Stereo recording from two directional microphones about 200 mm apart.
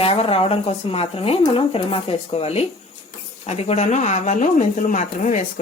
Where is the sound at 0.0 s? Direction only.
30° left (ahead or behind).